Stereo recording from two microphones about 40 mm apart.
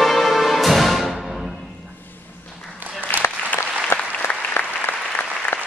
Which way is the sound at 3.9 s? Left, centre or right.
Left.